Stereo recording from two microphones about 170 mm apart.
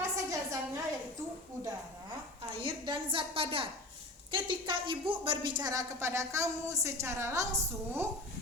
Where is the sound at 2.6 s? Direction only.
30° right (ahead or behind).